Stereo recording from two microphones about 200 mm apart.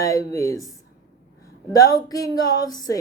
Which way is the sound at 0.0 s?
15° left (ahead or behind).